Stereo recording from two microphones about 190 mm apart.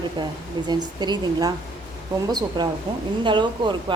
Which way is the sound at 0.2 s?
25° right (ahead or behind).